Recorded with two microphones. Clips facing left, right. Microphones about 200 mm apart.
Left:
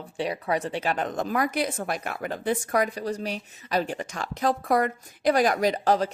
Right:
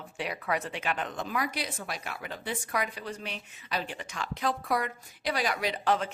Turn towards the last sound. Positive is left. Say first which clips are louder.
# left 6 dB
turn(degrees=40)  # may be behind; listen again after turning